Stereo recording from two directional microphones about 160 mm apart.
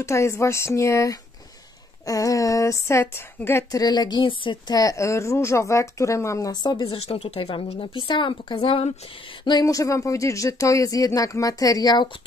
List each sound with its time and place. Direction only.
0.0 s speech: 20° left (ahead or behind)